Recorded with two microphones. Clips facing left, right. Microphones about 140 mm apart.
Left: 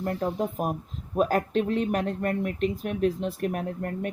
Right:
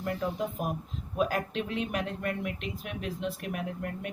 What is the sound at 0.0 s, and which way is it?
A woman's voice, 40° left (ahead or behind).